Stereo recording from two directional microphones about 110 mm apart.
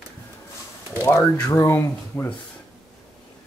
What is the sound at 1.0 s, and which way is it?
Speech, 25° left (ahead or behind).